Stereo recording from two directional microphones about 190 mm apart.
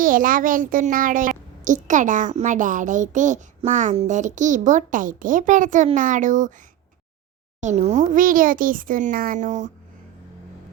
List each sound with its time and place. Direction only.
0.0 s a child's voice: 45° right (ahead or behind)
7.6 s a child's voice: 40° right (ahead or behind)